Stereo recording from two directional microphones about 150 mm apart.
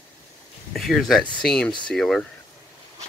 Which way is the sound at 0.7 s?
Centre (ahead or behind).